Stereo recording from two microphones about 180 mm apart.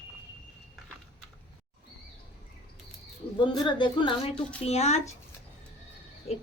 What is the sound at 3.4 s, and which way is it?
Speech, 25° left (ahead or behind).